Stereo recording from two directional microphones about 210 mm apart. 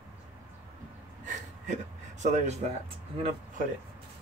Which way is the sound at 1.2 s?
35° right (ahead or behind).